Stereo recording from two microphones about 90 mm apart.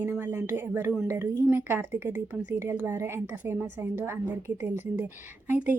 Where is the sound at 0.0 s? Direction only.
25° right (ahead or behind).